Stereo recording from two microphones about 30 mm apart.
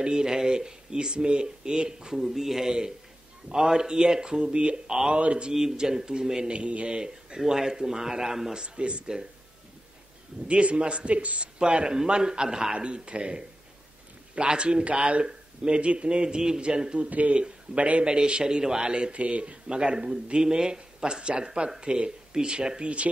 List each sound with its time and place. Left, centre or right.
0.0 s speech: right
2.1 s a man's voice: centre; by 5.5 s right
5.5 s a man's voice: centre
6.5 s a man's voice: right
7.0 s speech: right
8.6 s a man's voice: right
10.5 s a man's voice: right
12.7 s a man's voice: right
17.3 s a man's voice: right
18.0 s speech: right
19.1 s speech: right
19.8 s speech: right